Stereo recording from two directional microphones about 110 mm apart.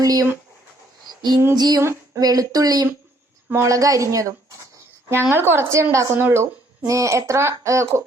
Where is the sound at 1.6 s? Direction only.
35° right (ahead or behind).